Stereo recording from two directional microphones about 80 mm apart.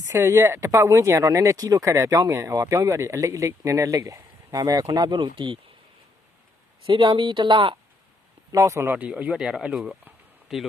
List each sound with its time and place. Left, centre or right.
0.1 s speech: right
6.8 s speech: right
8.5 s speech: right
9.0 s a man's voice: centre